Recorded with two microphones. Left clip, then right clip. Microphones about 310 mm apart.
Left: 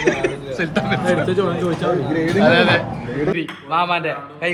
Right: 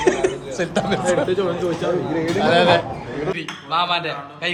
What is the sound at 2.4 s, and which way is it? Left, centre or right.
Speech, centre.